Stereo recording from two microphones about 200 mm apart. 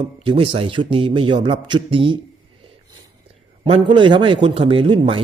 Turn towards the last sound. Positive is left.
turn(degrees=-25)  # may be behind; listen again after turning